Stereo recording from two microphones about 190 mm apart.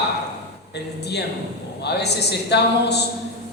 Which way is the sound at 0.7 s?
60° left (ahead or behind).